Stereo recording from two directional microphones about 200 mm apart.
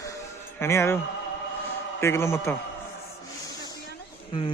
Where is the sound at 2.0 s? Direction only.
10° left (ahead or behind).